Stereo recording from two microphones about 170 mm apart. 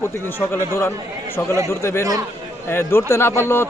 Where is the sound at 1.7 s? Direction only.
15° left (ahead or behind).